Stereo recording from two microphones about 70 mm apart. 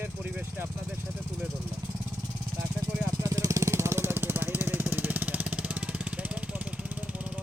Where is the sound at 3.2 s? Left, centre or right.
Right; by 7.4 s centre.